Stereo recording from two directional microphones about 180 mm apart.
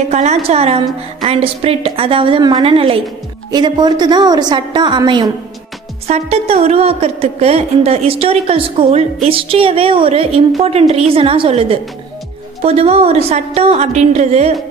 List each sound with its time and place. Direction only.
0.1 s a woman's voice: 40° right (ahead or behind)
6.0 s a woman's voice: 35° right (ahead or behind)